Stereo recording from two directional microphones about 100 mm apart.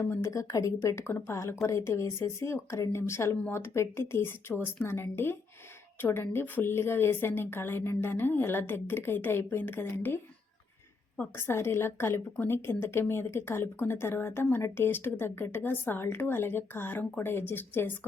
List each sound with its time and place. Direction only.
0.0 s a woman's voice: 30° left (ahead or behind)
11.3 s a woman's voice: 25° left (ahead or behind)